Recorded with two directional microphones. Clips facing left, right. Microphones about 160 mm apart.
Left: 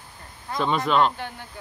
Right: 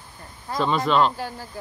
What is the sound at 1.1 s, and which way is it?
Speech, 35° right (ahead or behind).